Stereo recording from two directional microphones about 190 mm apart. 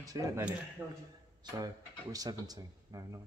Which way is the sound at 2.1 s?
20° right (ahead or behind).